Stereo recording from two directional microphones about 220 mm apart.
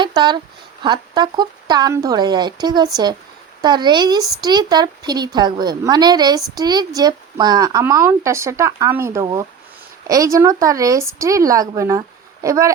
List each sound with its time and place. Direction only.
0.0 s a woman's voice: 20° right (ahead or behind)